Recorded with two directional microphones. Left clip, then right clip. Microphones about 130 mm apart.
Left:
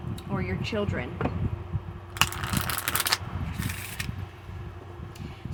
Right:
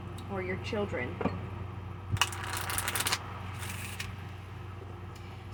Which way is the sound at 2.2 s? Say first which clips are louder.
Left 5 dB; 40° left (ahead or behind).